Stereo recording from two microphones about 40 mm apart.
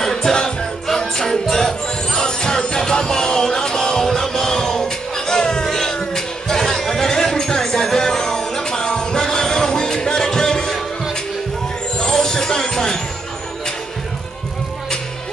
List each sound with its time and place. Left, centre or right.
0.0 s music: centre
12.0 s music: centre